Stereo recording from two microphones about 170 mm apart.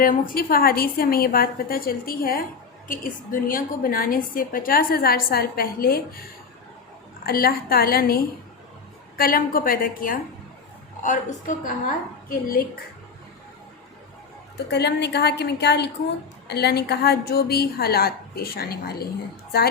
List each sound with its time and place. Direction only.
0.0 s a woman's voice: 55° left (ahead or behind)
7.3 s a woman's voice: 60° left (ahead or behind)
14.7 s a woman's voice: 75° left (ahead or behind)
16.5 s a woman's voice: 70° left (ahead or behind)